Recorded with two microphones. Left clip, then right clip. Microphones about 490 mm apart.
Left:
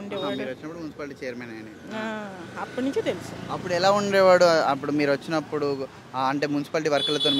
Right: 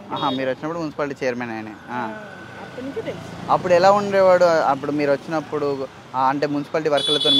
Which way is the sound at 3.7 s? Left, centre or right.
Centre.